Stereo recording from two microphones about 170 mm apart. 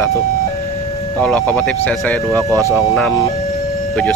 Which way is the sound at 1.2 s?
5° left (ahead or behind).